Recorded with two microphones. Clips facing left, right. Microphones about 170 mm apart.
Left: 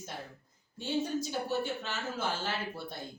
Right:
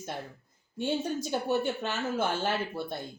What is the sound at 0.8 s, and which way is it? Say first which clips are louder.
A woman's voice: right 2 dB; 60° right (ahead or behind).